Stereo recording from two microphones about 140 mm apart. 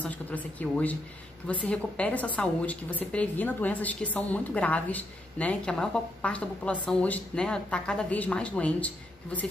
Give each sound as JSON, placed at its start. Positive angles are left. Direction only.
{"t": 0.0, "sound": "a woman's voice", "side_deg": 10}